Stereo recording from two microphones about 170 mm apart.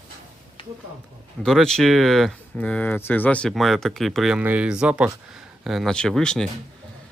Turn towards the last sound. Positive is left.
turn(degrees=5)  # may be behind; listen again after turning